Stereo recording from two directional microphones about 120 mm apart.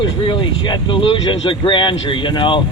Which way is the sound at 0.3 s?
40° left (ahead or behind).